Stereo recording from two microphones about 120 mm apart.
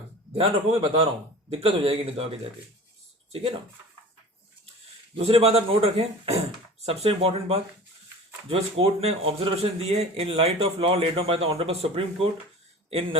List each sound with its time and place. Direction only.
0.3 s speech: 55° right (ahead or behind)
5.1 s a man's voice: 55° right (ahead or behind)